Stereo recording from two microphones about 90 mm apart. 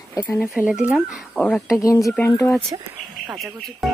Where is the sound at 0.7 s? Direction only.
15° right (ahead or behind).